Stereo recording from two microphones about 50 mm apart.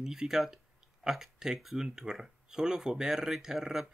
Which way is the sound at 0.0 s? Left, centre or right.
Centre.